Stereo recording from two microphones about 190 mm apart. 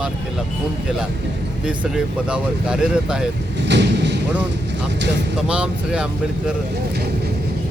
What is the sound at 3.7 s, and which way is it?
Vehicle, 65° right (ahead or behind).